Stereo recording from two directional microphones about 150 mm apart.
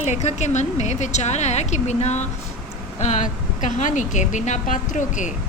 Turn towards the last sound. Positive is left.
turn(degrees=55)  # may be behind; listen again after turning